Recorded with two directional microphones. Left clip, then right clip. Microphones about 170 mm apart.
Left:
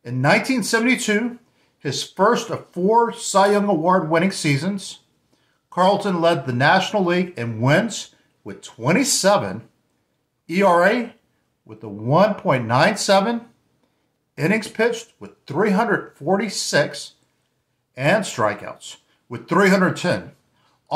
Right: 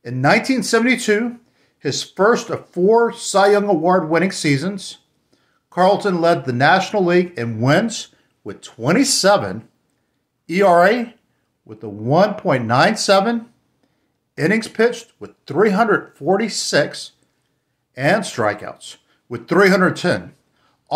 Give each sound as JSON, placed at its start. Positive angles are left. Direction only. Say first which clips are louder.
{"t": 0.0, "sound": "speech", "louder": "right 2 dB", "side_deg": -30}